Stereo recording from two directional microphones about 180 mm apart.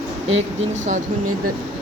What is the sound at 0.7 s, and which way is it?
Speech, 40° right (ahead or behind).